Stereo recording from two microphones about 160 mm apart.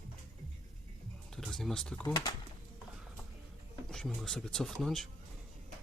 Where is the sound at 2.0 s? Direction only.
25° left (ahead or behind).